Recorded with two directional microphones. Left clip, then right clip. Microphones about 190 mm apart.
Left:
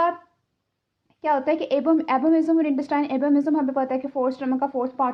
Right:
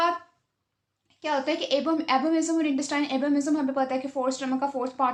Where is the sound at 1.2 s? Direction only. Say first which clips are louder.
Left 5 dB; 50° left (ahead or behind).